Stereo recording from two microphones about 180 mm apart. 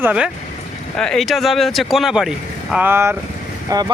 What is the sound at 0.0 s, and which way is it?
Speech, 5° right (ahead or behind).